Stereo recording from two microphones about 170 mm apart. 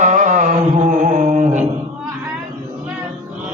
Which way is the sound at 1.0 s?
45° right (ahead or behind).